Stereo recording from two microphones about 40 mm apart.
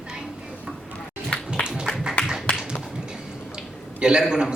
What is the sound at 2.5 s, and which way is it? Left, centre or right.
Tap, left.